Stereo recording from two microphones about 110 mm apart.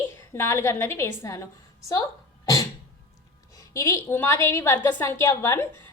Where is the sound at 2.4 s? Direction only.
30° left (ahead or behind).